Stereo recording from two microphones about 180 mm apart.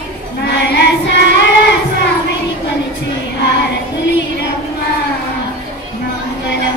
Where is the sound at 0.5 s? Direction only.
75° left (ahead or behind).